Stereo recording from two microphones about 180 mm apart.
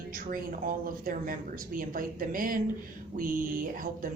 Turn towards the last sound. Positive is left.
turn(degrees=-50)  # may be behind; listen again after turning